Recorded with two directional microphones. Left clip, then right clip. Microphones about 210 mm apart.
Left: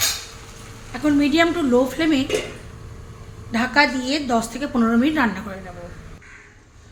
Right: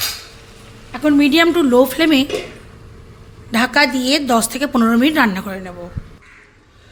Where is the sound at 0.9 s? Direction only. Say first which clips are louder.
Right 5 dB; 45° right (ahead or behind).